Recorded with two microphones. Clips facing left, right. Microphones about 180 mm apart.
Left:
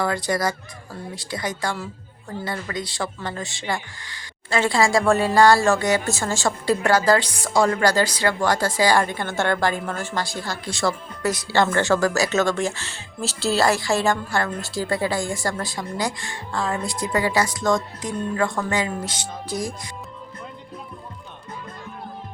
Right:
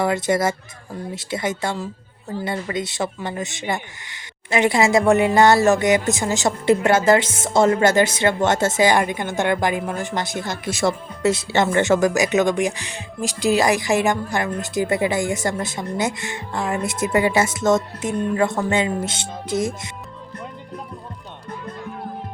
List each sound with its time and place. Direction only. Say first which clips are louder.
0.0 s speech: right 4 dB; 25° right (ahead or behind)